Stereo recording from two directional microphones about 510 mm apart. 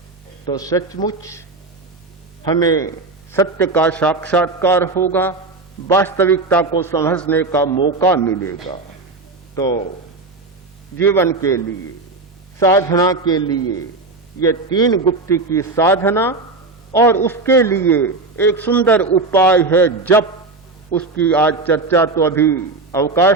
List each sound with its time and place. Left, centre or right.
0.4 s a man's voice: centre
10.9 s a man's voice: centre